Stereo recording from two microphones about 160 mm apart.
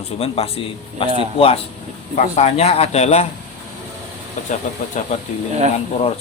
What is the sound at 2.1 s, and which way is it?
A man's voice, 45° left (ahead or behind).